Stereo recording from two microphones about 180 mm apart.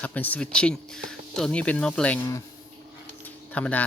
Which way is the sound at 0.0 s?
10° left (ahead or behind).